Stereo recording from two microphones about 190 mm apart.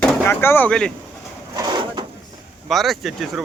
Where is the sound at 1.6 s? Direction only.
25° right (ahead or behind).